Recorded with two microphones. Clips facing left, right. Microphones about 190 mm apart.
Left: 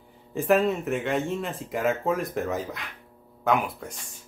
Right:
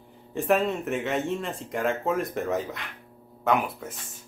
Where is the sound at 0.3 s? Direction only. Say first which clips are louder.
Left 2 dB; centre (ahead or behind).